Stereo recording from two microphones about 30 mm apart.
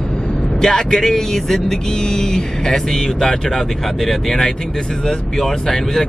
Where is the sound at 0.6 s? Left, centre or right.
Centre.